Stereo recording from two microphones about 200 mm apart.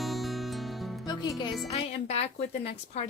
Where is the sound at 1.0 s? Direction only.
20° left (ahead or behind).